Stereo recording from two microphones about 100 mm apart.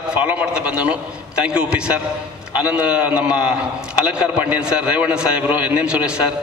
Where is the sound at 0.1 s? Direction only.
10° right (ahead or behind).